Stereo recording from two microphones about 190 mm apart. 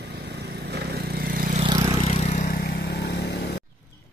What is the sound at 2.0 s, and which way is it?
Vehicle, 35° left (ahead or behind).